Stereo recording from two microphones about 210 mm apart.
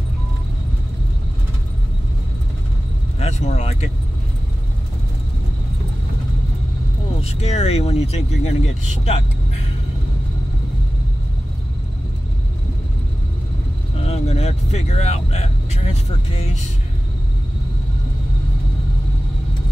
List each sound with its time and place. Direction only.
3.2 s vehicle: 30° left (ahead or behind)
7.2 s speech: 30° left (ahead or behind)
14.0 s speech: 30° left (ahead or behind)